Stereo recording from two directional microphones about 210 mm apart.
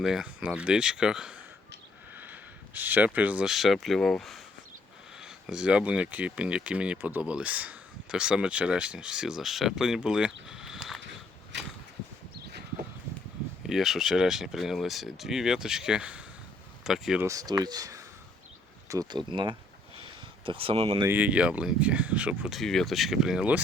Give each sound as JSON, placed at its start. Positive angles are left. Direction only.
{"t": 0.0, "sound": "speech", "side_deg": -5}
{"t": 10.4, "sound": "a sound", "side_deg": -5}
{"t": 13.7, "sound": "speech", "side_deg": 0}
{"t": 17.2, "sound": "speech", "side_deg": -15}
{"t": 20.0, "sound": "a sound", "side_deg": -25}
{"t": 20.9, "sound": "speech", "side_deg": -15}